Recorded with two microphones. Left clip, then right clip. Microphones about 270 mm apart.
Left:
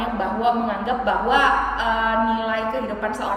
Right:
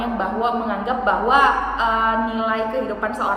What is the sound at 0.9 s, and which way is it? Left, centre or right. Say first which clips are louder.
A woman's voice: right 3 dB; centre.